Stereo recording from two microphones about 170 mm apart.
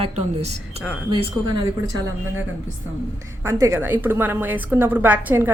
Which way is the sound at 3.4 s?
15° right (ahead or behind).